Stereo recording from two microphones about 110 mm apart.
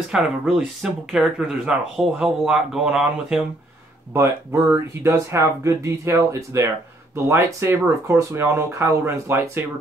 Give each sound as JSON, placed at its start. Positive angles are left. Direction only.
{"t": 0.1, "sound": "speech", "side_deg": -5}
{"t": 4.1, "sound": "speech", "side_deg": -25}